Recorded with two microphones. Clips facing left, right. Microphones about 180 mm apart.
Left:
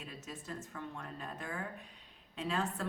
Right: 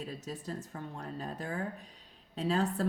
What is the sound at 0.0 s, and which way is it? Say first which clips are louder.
A woman's voice: right 7 dB; 35° right (ahead or behind).